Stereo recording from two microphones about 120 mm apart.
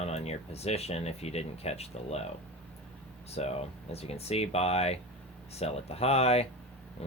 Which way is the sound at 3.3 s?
60° left (ahead or behind).